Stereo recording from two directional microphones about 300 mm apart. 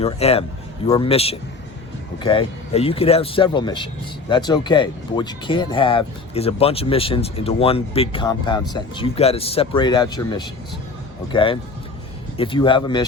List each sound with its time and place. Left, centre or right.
0.0 s speech: centre